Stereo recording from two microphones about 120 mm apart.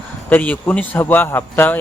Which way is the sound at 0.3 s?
15° left (ahead or behind).